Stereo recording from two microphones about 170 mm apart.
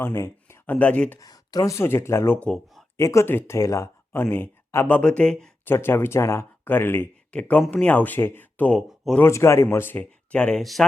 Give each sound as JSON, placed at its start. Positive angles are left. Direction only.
{"t": 0.0, "sound": "speech", "side_deg": 15}
{"t": 1.2, "sound": "speech", "side_deg": 20}
{"t": 3.0, "sound": "speech", "side_deg": 20}
{"t": 9.2, "sound": "speech", "side_deg": 15}